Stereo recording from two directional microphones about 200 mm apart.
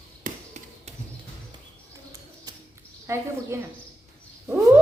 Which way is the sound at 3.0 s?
15° right (ahead or behind).